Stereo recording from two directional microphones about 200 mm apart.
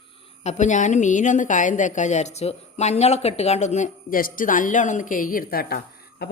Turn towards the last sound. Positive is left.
turn(degrees=50)  # may be behind; listen again after turning